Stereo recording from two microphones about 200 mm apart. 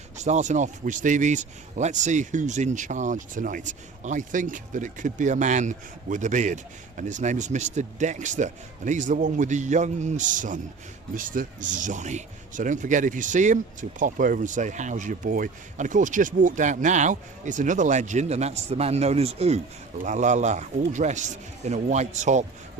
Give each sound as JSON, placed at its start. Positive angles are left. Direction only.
{"t": 0.2, "sound": "speech", "side_deg": -35}